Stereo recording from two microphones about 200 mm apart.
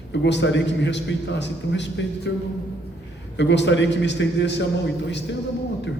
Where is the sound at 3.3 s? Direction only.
60° left (ahead or behind).